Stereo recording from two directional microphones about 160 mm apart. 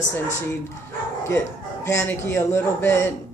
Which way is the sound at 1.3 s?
20° left (ahead or behind).